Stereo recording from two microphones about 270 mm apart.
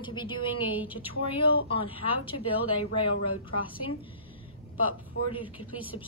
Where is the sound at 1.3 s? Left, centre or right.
Centre.